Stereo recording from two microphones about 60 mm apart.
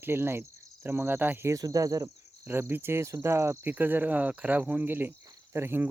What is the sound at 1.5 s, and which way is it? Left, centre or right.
Cricket, right.